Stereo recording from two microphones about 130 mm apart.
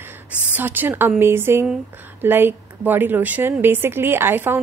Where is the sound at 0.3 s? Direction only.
15° right (ahead or behind).